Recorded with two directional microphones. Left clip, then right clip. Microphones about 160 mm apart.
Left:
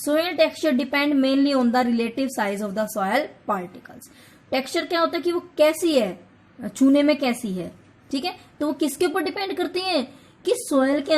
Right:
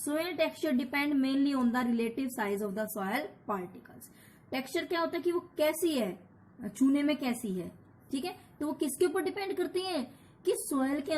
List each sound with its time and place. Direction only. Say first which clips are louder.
0.0 s a woman's voice: left 11 dB; 45° left (ahead or behind)